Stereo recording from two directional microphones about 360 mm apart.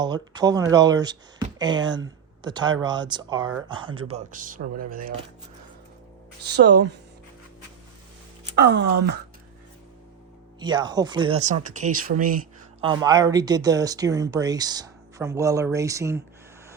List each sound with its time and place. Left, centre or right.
0.0 s speech: centre
6.4 s speech: right
8.5 s speech: right
10.6 s speech: centre